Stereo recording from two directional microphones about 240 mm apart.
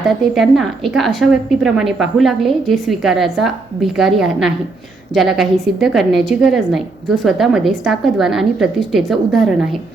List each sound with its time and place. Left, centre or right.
0.1 s a woman's voice: centre